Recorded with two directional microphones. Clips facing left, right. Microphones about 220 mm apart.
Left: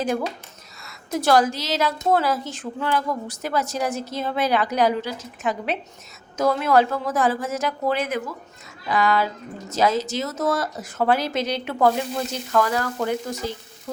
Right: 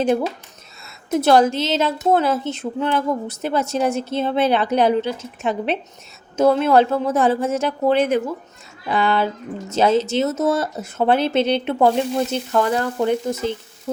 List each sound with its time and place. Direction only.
0.0 s a woman's voice: 25° right (ahead or behind)